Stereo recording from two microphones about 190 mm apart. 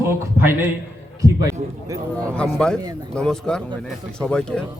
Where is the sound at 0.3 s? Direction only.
10° right (ahead or behind).